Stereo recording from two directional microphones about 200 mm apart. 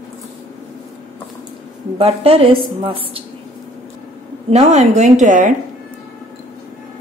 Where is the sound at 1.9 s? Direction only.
30° right (ahead or behind).